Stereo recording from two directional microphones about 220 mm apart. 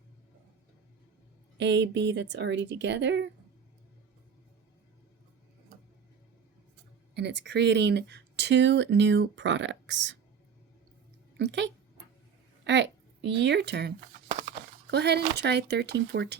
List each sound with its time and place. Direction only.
1.5 s speech: 50° right (ahead or behind)
7.1 s speech: 50° right (ahead or behind)
11.3 s speech: 50° right (ahead or behind)